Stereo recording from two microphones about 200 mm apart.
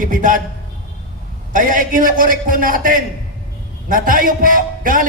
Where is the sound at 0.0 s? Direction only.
40° right (ahead or behind).